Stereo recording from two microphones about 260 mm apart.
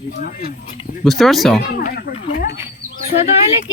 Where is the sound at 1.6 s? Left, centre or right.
Left.